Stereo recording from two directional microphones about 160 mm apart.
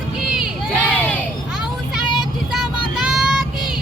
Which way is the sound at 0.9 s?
10° left (ahead or behind).